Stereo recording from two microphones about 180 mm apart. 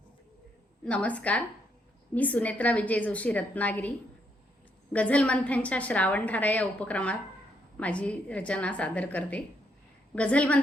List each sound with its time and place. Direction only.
0.9 s a woman's voice: 5° left (ahead or behind)